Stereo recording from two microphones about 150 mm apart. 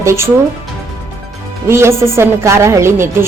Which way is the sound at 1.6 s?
15° right (ahead or behind).